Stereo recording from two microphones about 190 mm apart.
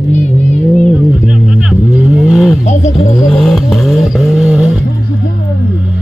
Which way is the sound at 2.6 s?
40° left (ahead or behind).